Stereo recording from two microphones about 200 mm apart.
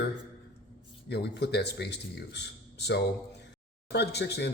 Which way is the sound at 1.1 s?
55° left (ahead or behind).